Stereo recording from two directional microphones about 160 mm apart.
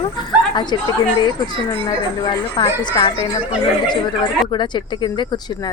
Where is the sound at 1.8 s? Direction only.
30° left (ahead or behind).